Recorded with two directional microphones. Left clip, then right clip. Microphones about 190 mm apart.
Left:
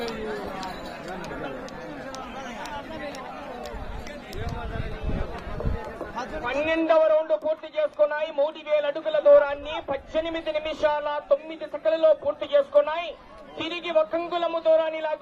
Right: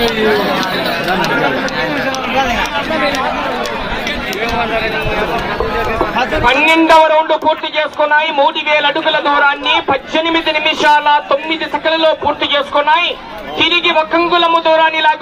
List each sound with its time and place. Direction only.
6.7 s a man's voice: 45° left (ahead or behind)